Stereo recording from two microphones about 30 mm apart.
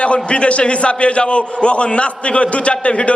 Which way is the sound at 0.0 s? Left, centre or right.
Left.